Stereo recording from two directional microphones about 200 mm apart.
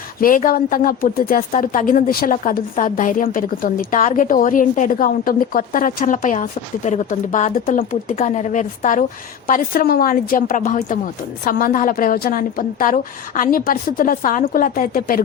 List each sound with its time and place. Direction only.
0.2 s a woman's voice: 45° left (ahead or behind)